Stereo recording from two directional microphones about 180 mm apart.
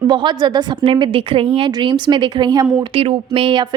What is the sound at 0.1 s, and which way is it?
A woman's voice, 25° right (ahead or behind).